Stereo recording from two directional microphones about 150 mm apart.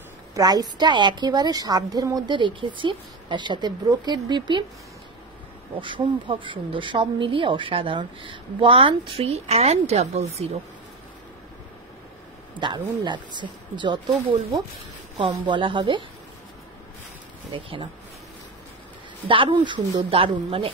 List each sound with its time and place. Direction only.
0.3 s a woman's voice: 25° right (ahead or behind)
5.8 s speech: 35° right (ahead or behind)
12.5 s speech: 30° right (ahead or behind)
15.1 s speech: 30° right (ahead or behind)
17.5 s speech: 35° right (ahead or behind)
19.2 s speech: 35° right (ahead or behind)